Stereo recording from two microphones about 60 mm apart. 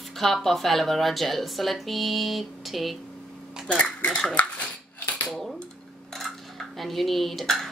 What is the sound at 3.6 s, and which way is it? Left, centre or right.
Speech, centre.